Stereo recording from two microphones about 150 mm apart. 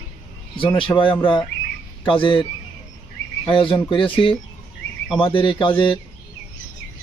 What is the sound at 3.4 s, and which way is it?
A man's voice, 35° left (ahead or behind).